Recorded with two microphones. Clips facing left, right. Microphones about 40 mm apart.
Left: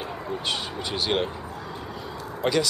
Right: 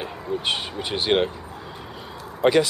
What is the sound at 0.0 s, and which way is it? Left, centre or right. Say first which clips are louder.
Speech: right 3 dB; right.